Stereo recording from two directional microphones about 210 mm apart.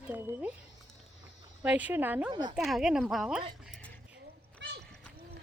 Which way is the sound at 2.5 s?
Centre (ahead or behind).